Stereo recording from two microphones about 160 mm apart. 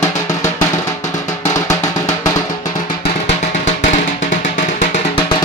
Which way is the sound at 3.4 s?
45° left (ahead or behind).